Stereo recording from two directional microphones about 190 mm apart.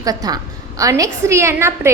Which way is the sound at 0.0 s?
20° right (ahead or behind).